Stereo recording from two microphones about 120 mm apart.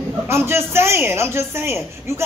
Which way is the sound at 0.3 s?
20° right (ahead or behind).